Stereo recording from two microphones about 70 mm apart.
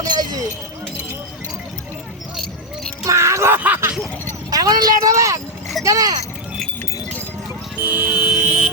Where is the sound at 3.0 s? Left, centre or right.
Right.